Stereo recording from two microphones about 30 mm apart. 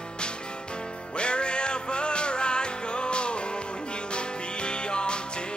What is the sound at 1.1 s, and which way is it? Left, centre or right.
Music, left.